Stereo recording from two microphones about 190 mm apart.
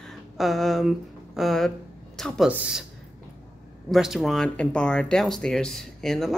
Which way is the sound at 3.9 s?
Centre (ahead or behind).